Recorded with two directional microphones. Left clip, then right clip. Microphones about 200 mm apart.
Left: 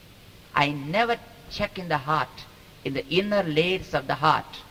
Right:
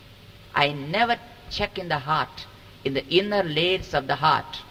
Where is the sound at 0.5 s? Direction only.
20° right (ahead or behind).